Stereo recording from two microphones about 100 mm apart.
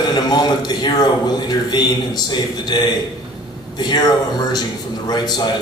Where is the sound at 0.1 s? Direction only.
45° left (ahead or behind).